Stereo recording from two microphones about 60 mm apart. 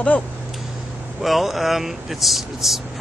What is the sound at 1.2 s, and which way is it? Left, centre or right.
Speech, centre.